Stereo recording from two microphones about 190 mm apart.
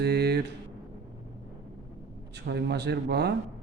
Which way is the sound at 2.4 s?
60° right (ahead or behind).